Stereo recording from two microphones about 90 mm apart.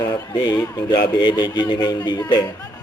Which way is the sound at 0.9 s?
55° left (ahead or behind).